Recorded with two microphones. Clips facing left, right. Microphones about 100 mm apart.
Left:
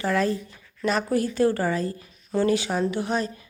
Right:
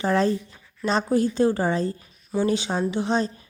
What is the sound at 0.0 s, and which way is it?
A woman's voice, 25° right (ahead or behind).